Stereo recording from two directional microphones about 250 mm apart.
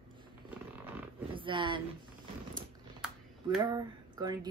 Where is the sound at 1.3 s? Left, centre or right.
Centre.